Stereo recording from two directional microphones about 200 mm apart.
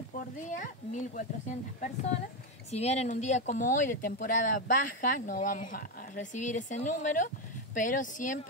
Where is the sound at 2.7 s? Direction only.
30° left (ahead or behind).